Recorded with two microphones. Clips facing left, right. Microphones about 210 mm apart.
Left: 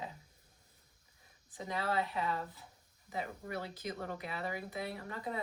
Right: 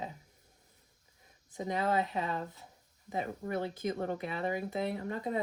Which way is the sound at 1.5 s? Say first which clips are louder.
Right 5 dB; 20° right (ahead or behind).